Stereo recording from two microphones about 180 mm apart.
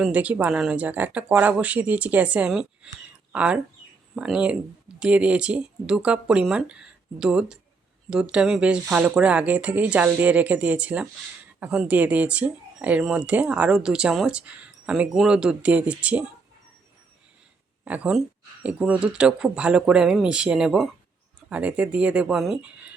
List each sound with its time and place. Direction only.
0.0 s speech: 10° right (ahead or behind)
17.8 s speech: 5° right (ahead or behind)